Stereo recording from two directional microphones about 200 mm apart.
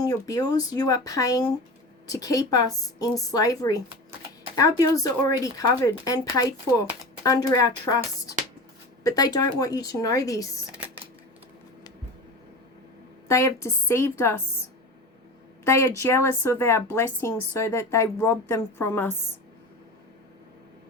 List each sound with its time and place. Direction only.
0.0 s a woman's voice: 20° left (ahead or behind)
10.8 s a sound: 10° right (ahead or behind)
13.2 s a woman's voice: 15° left (ahead or behind)
15.6 s a woman's voice: 15° left (ahead or behind)